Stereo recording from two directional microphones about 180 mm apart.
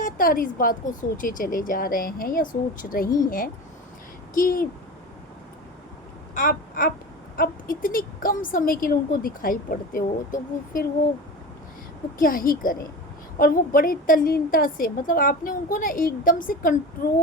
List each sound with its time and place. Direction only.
0.0 s a woman's voice: 50° left (ahead or behind)
6.3 s a sound: 50° left (ahead or behind)
7.3 s a woman's voice: 50° left (ahead or behind)
12.2 s a woman's voice: 50° left (ahead or behind)